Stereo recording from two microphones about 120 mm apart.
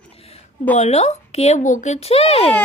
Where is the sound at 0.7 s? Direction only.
70° left (ahead or behind); by 2.5 s 55° left (ahead or behind).